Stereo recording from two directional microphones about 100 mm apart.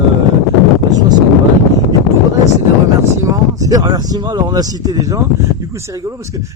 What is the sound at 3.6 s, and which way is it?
Speech, 35° right (ahead or behind).